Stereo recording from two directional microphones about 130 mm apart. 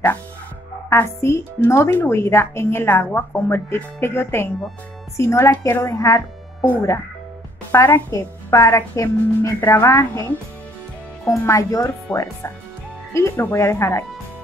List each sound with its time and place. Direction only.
0.8 s speech: 20° left (ahead or behind)
7.7 s speech: 20° left (ahead or behind)
11.4 s speech: 25° left (ahead or behind)